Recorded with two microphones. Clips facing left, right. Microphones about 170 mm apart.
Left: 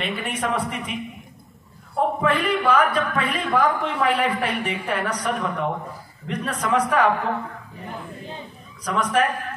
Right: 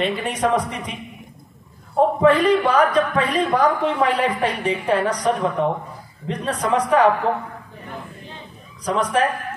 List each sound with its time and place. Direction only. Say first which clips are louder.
0.0 s a woman's voice: right 5 dB; 35° right (ahead or behind)
2.0 s a woman's voice: right 6 dB; 35° right (ahead or behind)
8.8 s a woman's voice: right 2 dB; 30° right (ahead or behind)